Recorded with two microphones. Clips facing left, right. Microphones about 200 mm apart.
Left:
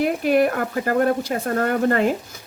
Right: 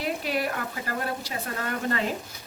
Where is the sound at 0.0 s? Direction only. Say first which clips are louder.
Left 10 dB; 50° left (ahead or behind).